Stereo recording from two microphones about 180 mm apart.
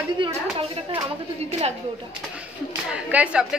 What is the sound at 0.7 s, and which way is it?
A woman's voice, 30° right (ahead or behind).